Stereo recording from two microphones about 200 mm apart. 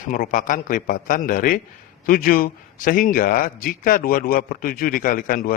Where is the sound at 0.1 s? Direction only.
40° left (ahead or behind).